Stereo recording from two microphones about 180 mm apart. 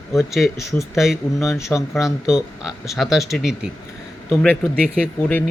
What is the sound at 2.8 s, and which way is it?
Speech, centre (ahead or behind).